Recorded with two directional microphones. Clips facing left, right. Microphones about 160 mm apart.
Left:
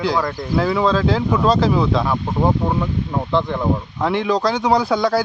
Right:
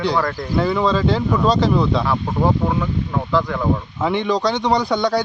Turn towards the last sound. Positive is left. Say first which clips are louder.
# left 1 dB
turn(degrees=0)  # may be behind; listen again after turning